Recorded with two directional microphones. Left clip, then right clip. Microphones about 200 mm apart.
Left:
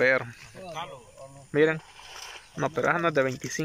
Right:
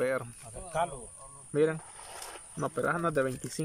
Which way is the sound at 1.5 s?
5° right (ahead or behind).